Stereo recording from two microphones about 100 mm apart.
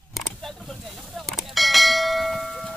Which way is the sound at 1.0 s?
Centre (ahead or behind).